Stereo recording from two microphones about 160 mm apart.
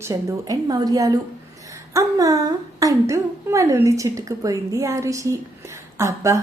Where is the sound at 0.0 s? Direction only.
20° right (ahead or behind).